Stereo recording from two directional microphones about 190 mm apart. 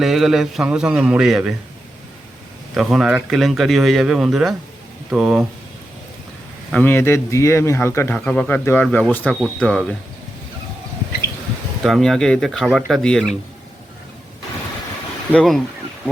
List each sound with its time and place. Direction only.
0.0 s speech: centre (ahead or behind)
2.7 s speech: centre (ahead or behind)
6.7 s speech: 10° left (ahead or behind)
11.8 s speech: centre (ahead or behind)
15.3 s speech: 5° left (ahead or behind)